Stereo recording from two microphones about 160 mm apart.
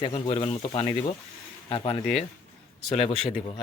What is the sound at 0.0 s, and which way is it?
Speech, 35° left (ahead or behind).